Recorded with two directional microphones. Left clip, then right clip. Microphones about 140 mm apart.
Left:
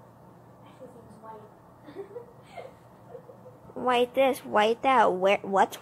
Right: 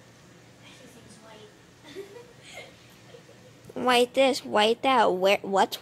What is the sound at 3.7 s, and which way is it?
Speech, 15° right (ahead or behind).